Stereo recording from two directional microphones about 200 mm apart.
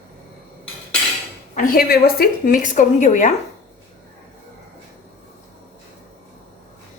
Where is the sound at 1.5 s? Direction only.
45° left (ahead or behind).